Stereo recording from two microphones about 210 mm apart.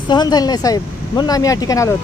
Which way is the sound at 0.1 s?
20° left (ahead or behind).